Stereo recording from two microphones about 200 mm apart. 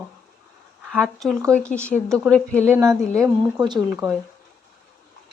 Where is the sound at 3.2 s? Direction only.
20° right (ahead or behind).